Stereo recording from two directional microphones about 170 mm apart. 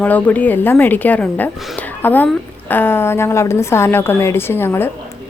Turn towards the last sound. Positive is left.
turn(degrees=15)  # may be behind; listen again after turning